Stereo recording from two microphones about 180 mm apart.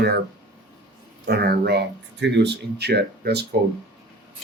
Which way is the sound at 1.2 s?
60° right (ahead or behind).